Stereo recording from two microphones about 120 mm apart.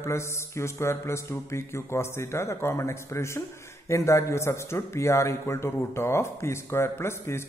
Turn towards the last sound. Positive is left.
turn(degrees=20)  # may be behind; listen again after turning